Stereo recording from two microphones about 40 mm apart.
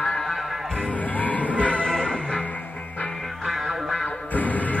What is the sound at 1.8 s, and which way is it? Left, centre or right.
Music, centre.